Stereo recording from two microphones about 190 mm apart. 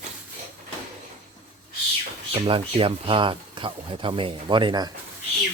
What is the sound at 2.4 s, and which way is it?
Speech, 30° right (ahead or behind).